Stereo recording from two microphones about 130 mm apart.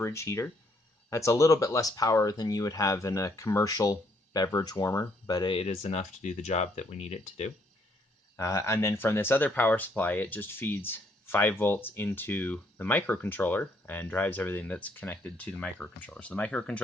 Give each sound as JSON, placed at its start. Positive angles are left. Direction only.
{"t": 0.0, "sound": "speech", "side_deg": 20}
{"t": 8.4, "sound": "speech", "side_deg": 20}